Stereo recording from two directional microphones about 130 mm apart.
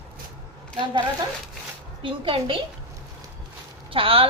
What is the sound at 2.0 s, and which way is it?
Speech, 45° right (ahead or behind).